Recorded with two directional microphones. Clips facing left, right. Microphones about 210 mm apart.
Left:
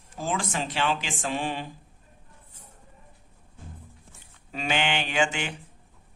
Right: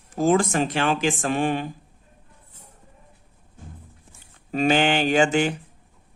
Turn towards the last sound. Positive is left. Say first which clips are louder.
# right 8 dB
turn(degrees=-40)  # may be behind; listen again after turning